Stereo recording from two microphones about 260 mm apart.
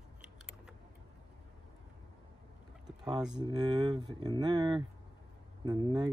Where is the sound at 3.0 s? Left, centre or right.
Centre.